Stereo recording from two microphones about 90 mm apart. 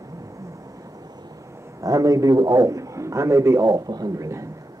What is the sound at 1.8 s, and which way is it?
Speech, 40° right (ahead or behind).